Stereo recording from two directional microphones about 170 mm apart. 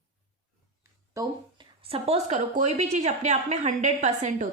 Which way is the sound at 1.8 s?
35° right (ahead or behind).